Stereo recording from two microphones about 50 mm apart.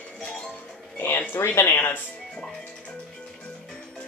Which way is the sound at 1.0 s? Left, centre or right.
Left.